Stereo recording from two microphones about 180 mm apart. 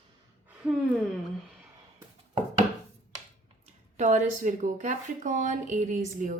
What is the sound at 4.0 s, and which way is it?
Speech, 40° right (ahead or behind).